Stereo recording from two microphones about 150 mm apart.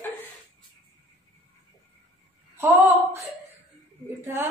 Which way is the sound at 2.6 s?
15° right (ahead or behind).